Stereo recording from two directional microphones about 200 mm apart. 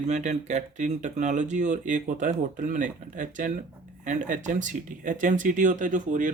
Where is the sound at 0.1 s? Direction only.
35° right (ahead or behind).